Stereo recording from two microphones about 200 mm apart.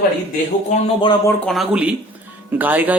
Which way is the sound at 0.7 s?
25° left (ahead or behind).